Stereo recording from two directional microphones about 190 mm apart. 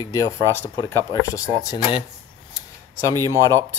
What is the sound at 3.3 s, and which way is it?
Speech, 15° left (ahead or behind).